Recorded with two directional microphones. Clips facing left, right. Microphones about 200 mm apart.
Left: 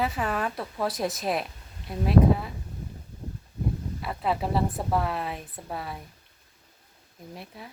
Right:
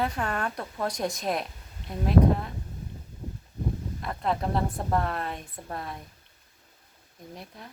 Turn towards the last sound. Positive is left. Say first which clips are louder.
# left 2 dB
turn(degrees=5)  # may be behind; listen again after turning